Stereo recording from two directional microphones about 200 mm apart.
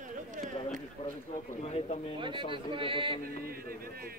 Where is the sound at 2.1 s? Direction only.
25° right (ahead or behind).